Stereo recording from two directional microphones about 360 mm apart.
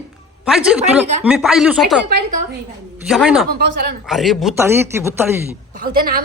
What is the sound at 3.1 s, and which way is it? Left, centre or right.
A man's voice, centre.